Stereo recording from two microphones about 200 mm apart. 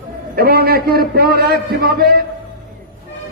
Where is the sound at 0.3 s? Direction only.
50° right (ahead or behind).